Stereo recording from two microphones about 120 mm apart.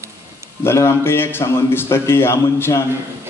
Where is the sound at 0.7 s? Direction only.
20° left (ahead or behind).